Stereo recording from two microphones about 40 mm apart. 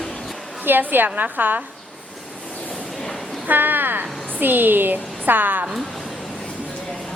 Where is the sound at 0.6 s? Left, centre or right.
Right.